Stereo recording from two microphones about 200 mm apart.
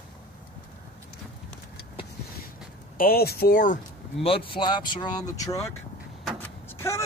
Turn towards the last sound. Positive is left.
turn(degrees=15)  # may be behind; listen again after turning